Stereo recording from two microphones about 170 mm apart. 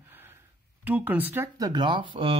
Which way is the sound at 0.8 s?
10° right (ahead or behind).